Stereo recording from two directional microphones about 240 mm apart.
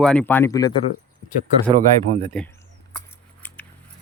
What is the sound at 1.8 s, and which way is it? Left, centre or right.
Speech, right.